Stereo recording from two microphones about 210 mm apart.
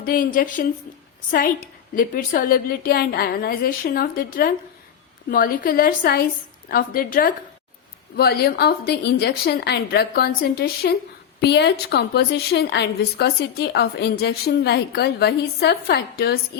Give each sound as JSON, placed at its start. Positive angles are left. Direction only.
{"t": 0.0, "sound": "a woman's voice", "side_deg": 40}